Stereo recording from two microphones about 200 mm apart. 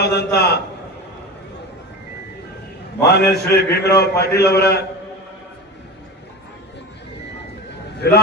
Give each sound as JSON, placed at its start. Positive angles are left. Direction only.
{"t": 0.0, "sound": "a man's voice", "side_deg": 55}
{"t": 3.0, "sound": "a man's voice", "side_deg": 55}
{"t": 8.0, "sound": "a man's voice", "side_deg": 55}